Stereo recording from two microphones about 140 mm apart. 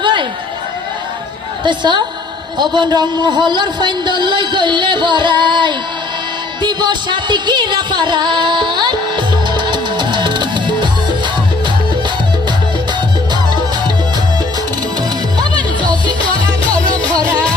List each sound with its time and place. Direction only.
0.0 s a sound: 35° right (ahead or behind)
1.6 s speech: 35° right (ahead or behind)
6.6 s music: 30° right (ahead or behind)
15.4 s music: 30° right (ahead or behind)